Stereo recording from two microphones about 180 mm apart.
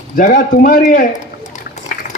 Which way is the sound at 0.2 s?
50° left (ahead or behind).